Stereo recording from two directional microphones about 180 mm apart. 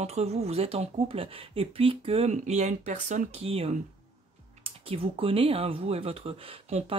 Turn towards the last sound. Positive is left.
turn(degrees=-30)  # may be behind; listen again after turning